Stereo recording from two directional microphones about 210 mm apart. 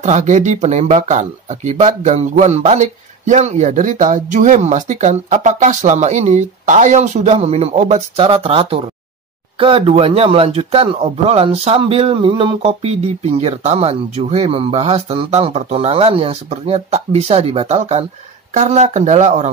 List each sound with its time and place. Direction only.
0.0 s speech: 35° right (ahead or behind)